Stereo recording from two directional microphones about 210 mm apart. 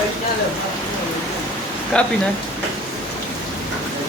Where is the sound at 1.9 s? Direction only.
5° left (ahead or behind).